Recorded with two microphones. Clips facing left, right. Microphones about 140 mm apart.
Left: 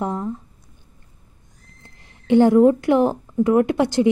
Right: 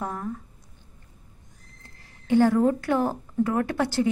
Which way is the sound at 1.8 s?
20° left (ahead or behind).